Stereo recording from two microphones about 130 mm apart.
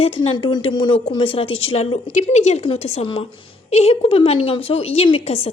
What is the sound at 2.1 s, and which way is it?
Speech, 65° left (ahead or behind).